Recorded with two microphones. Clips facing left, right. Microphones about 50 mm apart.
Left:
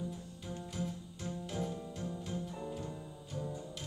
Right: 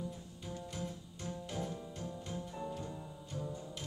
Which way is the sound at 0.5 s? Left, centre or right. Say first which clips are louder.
Left 2 dB; centre.